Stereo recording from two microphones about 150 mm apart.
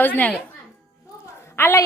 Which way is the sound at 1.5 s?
15° left (ahead or behind).